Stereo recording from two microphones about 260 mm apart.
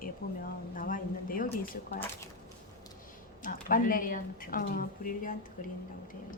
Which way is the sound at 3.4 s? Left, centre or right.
Left.